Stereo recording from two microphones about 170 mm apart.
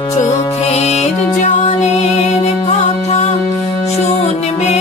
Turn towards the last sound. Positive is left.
turn(degrees=40)  # may be behind; listen again after turning